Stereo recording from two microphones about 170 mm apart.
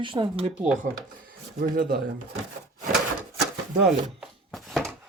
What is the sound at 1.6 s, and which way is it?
Speech, 60° right (ahead or behind).